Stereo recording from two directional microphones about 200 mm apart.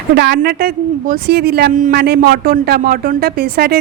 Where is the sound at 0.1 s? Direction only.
55° right (ahead or behind).